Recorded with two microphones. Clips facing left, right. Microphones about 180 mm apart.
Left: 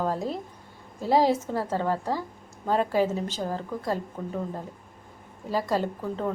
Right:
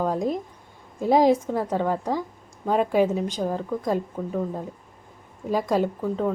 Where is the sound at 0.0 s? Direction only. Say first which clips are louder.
Right 4 dB; 15° right (ahead or behind).